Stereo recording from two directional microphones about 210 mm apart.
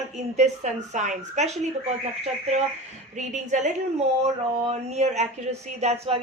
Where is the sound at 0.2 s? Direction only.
35° right (ahead or behind).